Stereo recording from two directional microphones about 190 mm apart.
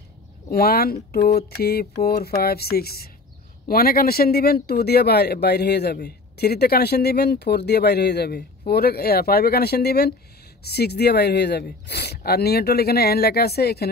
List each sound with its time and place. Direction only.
0.5 s speech: 55° left (ahead or behind)